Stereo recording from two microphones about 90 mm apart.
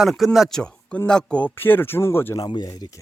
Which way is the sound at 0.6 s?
10° left (ahead or behind).